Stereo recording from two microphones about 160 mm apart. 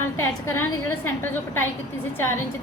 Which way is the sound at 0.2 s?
15° left (ahead or behind).